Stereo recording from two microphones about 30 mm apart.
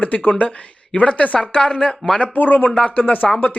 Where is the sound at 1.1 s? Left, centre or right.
Left.